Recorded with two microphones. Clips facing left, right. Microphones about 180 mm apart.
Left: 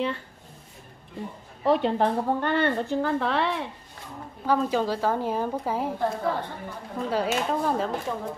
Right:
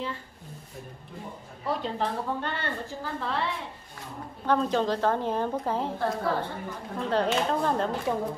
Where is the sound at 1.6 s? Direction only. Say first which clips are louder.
Left 8 dB; 65° left (ahead or behind).